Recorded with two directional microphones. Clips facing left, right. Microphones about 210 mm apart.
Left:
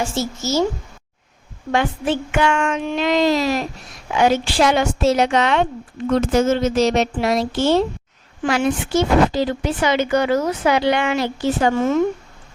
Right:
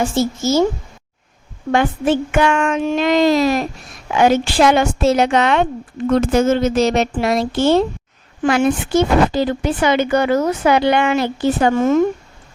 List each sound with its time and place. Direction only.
0.0 s speech: 55° right (ahead or behind)
1.7 s a woman's voice: 50° right (ahead or behind)